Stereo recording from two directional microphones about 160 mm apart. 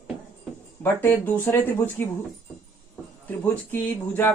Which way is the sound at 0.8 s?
15° left (ahead or behind).